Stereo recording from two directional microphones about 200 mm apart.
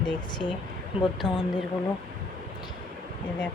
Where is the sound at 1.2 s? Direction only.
5° left (ahead or behind).